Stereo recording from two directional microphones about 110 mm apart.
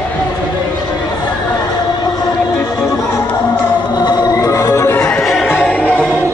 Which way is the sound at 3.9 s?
35° left (ahead or behind).